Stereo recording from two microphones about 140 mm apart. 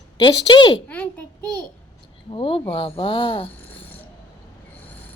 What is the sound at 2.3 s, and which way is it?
Speech, 40° left (ahead or behind).